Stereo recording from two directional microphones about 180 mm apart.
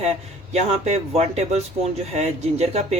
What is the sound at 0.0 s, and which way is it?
Speech, 35° right (ahead or behind).